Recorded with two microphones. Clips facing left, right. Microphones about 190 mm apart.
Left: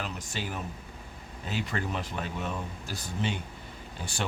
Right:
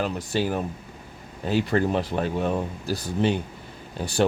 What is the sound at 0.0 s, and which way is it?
Speech, 35° right (ahead or behind).